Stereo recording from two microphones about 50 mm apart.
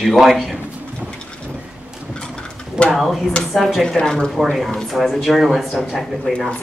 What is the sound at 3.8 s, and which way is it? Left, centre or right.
Speech, centre.